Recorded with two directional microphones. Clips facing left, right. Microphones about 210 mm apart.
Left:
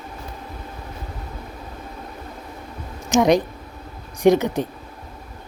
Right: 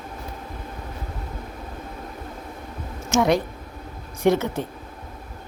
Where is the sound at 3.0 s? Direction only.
15° left (ahead or behind).